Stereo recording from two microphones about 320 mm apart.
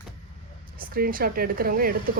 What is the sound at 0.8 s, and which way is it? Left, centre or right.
Speech, right.